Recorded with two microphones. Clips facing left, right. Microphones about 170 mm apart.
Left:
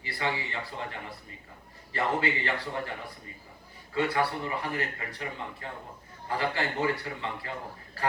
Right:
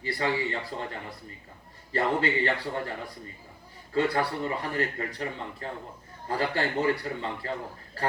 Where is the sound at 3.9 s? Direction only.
35° right (ahead or behind).